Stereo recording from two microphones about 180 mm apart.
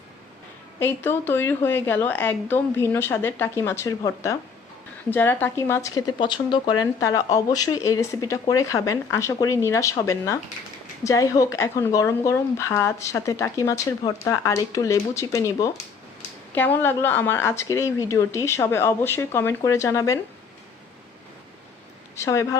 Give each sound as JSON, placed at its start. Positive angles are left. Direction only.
{"t": 0.8, "sound": "speech", "side_deg": 10}
{"t": 22.2, "sound": "speech", "side_deg": 15}